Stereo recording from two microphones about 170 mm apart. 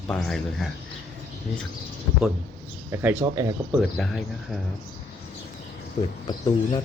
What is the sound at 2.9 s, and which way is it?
Speech, 10° right (ahead or behind).